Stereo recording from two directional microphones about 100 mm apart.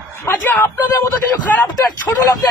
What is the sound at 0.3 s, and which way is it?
Speech, 20° left (ahead or behind).